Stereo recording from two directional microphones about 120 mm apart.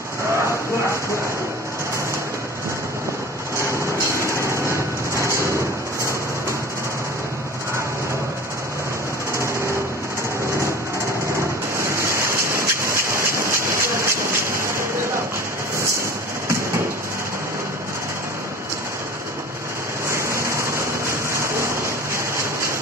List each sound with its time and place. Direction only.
4.1 s vehicle: 25° right (ahead or behind)
11.8 s rain: 25° right (ahead or behind)
20.1 s a sound: 25° right (ahead or behind)